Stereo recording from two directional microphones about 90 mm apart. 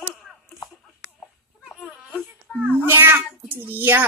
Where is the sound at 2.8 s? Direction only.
25° right (ahead or behind).